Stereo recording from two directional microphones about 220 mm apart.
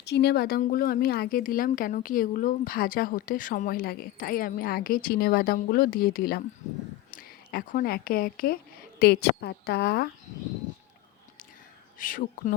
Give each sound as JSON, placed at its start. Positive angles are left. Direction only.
{"t": 0.0, "sound": "a woman's voice", "side_deg": 50}
{"t": 11.9, "sound": "a woman's voice", "side_deg": 40}